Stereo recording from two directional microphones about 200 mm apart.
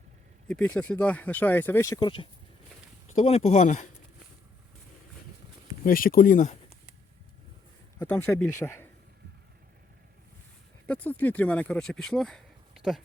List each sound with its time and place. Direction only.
0.4 s speech: 5° left (ahead or behind); by 2.2 s 20° left (ahead or behind)
3.2 s speech: 35° left (ahead or behind)
5.8 s speech: 45° left (ahead or behind)
7.9 s speech: 15° left (ahead or behind)
10.8 s speech: 10° left (ahead or behind)